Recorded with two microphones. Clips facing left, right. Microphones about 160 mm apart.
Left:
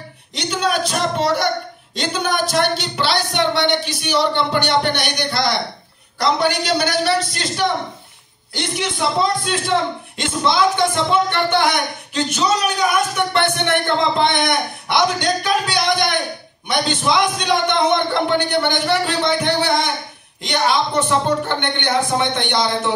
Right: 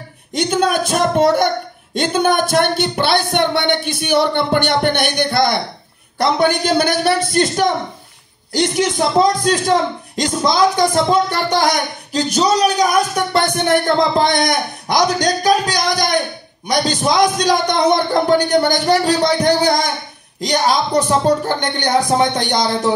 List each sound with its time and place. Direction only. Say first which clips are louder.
0.3 s a man's voice: right 5 dB; 50° right (ahead or behind)